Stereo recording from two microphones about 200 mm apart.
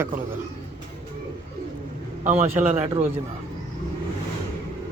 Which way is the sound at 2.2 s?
35° right (ahead or behind).